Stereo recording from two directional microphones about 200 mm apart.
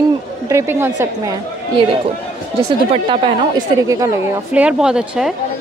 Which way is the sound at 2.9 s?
25° right (ahead or behind).